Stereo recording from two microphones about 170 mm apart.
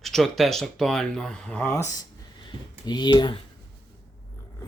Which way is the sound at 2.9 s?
25° left (ahead or behind).